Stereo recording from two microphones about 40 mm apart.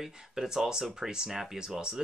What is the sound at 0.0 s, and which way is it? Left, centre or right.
Speech, centre.